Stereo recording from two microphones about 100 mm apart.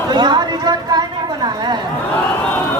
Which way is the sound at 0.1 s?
45° right (ahead or behind).